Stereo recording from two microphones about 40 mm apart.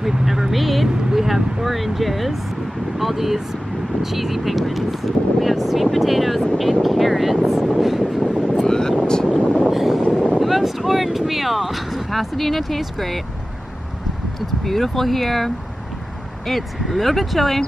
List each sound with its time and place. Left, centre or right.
0.0 s speech: centre
8.6 s vehicle: centre
9.7 s vehicle: centre
10.4 s speech: centre
14.4 s speech: centre